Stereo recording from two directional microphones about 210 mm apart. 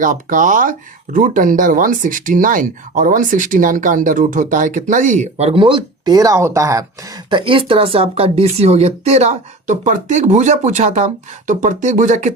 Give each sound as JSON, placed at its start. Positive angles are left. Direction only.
{"t": 0.0, "sound": "speech", "side_deg": -40}